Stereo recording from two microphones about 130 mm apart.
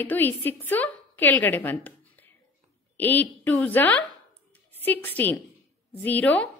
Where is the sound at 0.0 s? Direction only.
15° left (ahead or behind).